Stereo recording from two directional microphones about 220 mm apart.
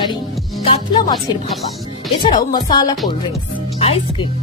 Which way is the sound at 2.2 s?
20° left (ahead or behind).